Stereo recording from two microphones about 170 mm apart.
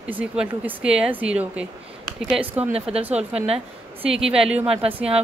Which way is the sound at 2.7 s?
35° right (ahead or behind).